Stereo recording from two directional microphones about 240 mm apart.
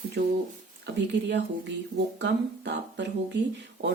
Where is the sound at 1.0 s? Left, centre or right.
Right.